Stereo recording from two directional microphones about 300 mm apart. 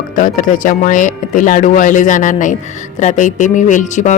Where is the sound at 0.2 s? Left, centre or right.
Left.